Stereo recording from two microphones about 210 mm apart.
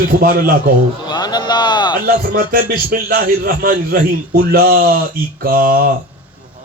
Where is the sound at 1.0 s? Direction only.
20° left (ahead or behind).